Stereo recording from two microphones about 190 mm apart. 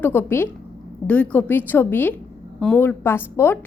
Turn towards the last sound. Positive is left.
turn(degrees=10)  # may be behind; listen again after turning